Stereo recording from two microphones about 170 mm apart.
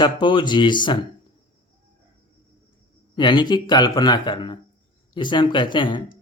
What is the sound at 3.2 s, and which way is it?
Speech, 25° left (ahead or behind).